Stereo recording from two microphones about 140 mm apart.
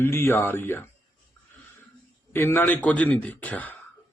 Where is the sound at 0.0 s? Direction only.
15° left (ahead or behind).